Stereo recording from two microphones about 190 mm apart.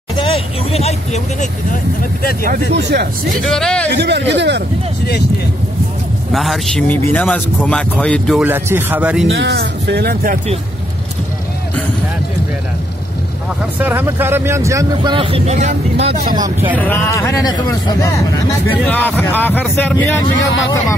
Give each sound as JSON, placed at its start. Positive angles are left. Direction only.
{"t": 0.1, "sound": "speech", "side_deg": 30}
{"t": 2.7, "sound": "speech", "side_deg": -60}
{"t": 3.4, "sound": "a man's voice", "side_deg": 5}
{"t": 3.9, "sound": "speech", "side_deg": -60}
{"t": 6.3, "sound": "a man's voice", "side_deg": 0}
{"t": 8.4, "sound": "speech", "side_deg": -10}
{"t": 9.3, "sound": "speech", "side_deg": -65}
{"t": 13.6, "sound": "speech", "side_deg": -10}
{"t": 16.3, "sound": "speech", "side_deg": -20}
{"t": 16.7, "sound": "speech", "side_deg": 10}
{"t": 18.7, "sound": "speech", "side_deg": 10}